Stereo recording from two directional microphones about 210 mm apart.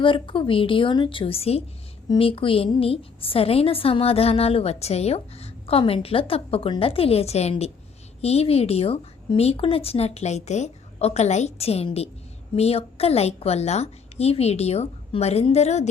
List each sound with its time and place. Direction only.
0.0 s a woman's voice: 25° left (ahead or behind)